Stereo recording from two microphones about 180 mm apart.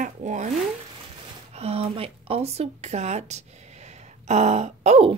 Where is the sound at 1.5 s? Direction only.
35° right (ahead or behind).